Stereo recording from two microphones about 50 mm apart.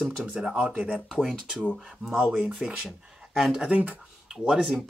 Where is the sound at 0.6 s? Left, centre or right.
Right.